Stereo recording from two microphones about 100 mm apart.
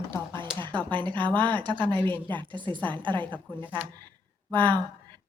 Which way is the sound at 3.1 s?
15° left (ahead or behind).